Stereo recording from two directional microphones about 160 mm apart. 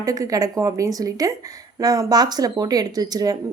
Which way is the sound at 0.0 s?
20° right (ahead or behind).